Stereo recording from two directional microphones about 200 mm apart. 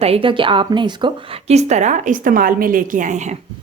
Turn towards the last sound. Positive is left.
turn(degrees=-40)  # may be behind; listen again after turning